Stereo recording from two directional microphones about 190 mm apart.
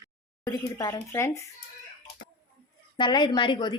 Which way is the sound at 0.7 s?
20° left (ahead or behind).